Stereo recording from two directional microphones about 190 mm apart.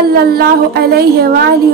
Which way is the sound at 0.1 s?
55° right (ahead or behind).